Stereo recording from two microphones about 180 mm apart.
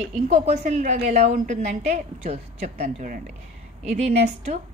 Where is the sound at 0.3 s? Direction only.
40° right (ahead or behind).